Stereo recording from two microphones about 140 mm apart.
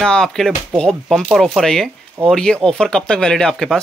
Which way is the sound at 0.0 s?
5° left (ahead or behind).